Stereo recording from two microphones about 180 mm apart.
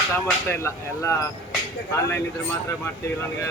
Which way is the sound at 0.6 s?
15° left (ahead or behind).